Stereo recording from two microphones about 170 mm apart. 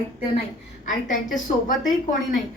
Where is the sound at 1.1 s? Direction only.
50° left (ahead or behind).